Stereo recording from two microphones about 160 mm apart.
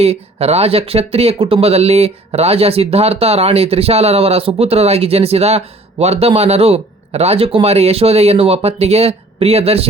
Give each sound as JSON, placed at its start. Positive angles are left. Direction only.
{"t": 0.0, "sound": "speech", "side_deg": -40}